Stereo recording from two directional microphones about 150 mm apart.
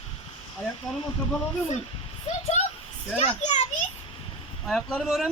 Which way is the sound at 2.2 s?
45° left (ahead or behind).